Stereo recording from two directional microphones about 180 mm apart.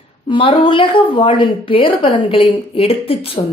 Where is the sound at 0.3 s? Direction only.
30° left (ahead or behind).